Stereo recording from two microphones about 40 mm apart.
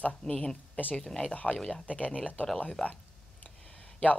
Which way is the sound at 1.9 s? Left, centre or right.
Left.